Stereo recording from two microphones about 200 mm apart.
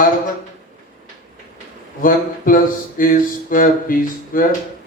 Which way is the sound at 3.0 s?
45° left (ahead or behind).